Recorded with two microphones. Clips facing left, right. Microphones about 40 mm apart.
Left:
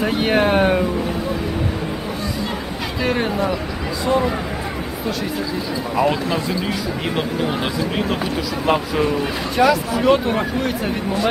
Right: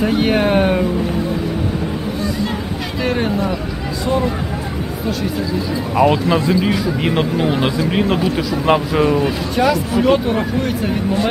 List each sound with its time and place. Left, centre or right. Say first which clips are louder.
0.0 s speech: right 2 dB; centre
3.0 s speech: right 1 dB; centre
5.9 s speech: right 5 dB; centre
9.2 s speech: right 1 dB; centre